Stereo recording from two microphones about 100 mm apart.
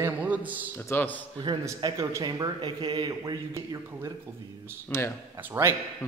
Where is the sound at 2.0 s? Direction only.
35° right (ahead or behind).